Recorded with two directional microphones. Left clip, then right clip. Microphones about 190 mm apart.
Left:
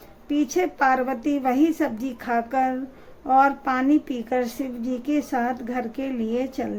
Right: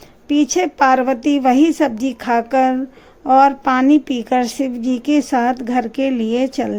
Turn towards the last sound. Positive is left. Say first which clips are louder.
# right 8 dB
turn(degrees=-35)  # may be behind; listen again after turning